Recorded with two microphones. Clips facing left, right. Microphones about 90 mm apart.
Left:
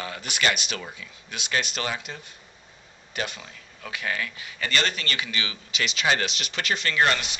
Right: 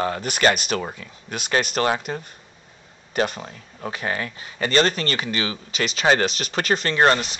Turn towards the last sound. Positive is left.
turn(degrees=-35)  # may be behind; listen again after turning